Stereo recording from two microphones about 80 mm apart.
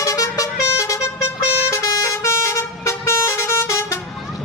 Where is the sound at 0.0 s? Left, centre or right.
Left.